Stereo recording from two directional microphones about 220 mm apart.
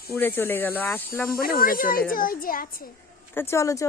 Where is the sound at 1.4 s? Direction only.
40° left (ahead or behind).